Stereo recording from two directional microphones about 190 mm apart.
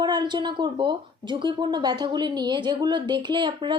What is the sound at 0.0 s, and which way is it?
Speech, 20° right (ahead or behind).